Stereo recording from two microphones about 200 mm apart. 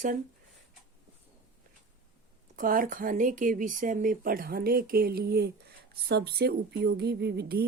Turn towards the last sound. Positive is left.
turn(degrees=-55)  # may be behind; listen again after turning